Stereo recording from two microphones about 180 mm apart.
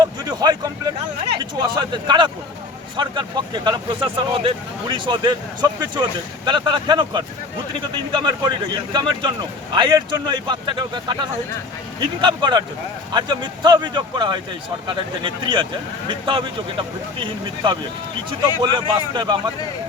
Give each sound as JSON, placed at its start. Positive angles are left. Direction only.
{"t": 0.0, "sound": "vehicle", "side_deg": -20}
{"t": 1.5, "sound": "speech", "side_deg": -25}